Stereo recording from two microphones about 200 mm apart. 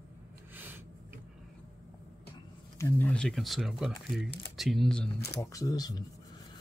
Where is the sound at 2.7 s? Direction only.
10° left (ahead or behind).